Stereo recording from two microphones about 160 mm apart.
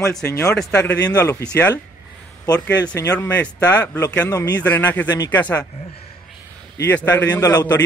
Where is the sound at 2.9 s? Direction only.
15° left (ahead or behind).